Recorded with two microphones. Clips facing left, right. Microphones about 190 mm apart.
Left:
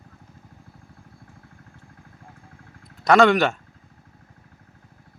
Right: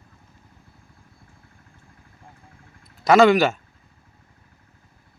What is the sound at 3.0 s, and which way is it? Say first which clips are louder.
Speech: right 2 dB; 5° right (ahead or behind).